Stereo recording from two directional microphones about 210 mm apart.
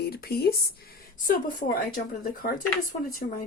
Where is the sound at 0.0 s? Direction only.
50° left (ahead or behind).